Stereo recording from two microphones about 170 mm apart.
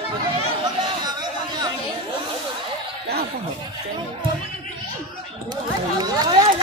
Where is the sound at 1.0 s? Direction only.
25° right (ahead or behind).